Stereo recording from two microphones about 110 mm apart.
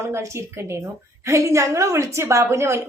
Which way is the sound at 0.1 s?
25° right (ahead or behind).